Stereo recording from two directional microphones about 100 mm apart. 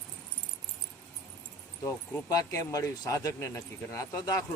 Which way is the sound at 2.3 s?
35° left (ahead or behind).